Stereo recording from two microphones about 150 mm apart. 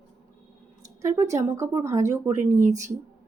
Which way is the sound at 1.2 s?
20° right (ahead or behind).